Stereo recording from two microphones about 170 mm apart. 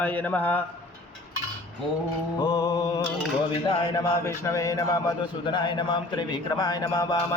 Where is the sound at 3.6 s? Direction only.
20° left (ahead or behind).